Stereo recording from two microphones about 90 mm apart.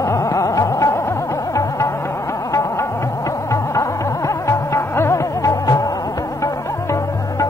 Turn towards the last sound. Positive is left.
turn(degrees=35)  # may be behind; listen again after turning